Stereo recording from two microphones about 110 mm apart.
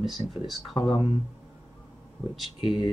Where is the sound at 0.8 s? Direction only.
45° left (ahead or behind).